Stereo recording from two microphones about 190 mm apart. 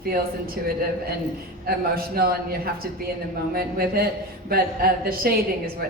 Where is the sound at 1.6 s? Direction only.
50° right (ahead or behind).